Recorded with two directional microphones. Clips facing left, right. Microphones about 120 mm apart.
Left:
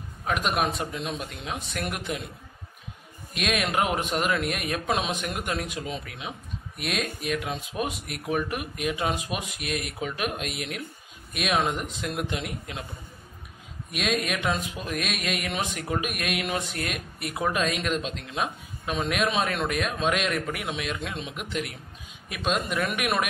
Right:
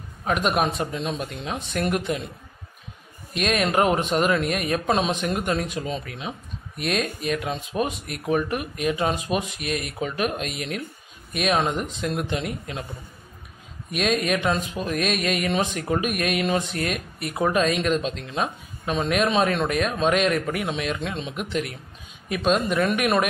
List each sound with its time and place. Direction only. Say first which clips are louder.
0.2 s speech: right 4 dB; centre (ahead or behind)
1.0 s speech: right 4 dB; 45° right (ahead or behind)
1.4 s speech: right 8 dB; centre (ahead or behind)
3.3 s speech: right 4 dB; 5° left (ahead or behind)
3.6 s speech: right 7 dB; 45° right (ahead or behind)
4.2 s speech: right 5 dB; 5° left (ahead or behind)
5.2 s speech: right 6 dB; 40° right (ahead or behind)
5.5 s speech: right 5 dB; 5° left (ahead or behind)
13.9 s speech: right 5 dB; centre (ahead or behind)